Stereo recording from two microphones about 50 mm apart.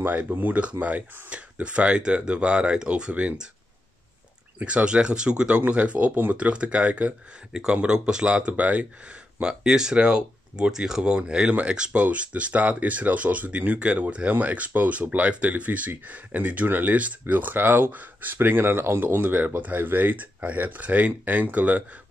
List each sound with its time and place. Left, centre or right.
0.2 s speech: right
4.6 s speech: right
7.5 s speech: centre
9.4 s speech: centre; by 19.2 s right
19.2 s speech: right